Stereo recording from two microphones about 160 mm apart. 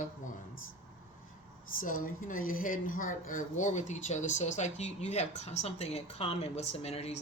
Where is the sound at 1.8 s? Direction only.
55° left (ahead or behind).